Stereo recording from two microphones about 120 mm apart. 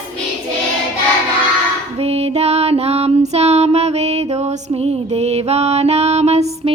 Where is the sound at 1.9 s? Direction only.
60° right (ahead or behind).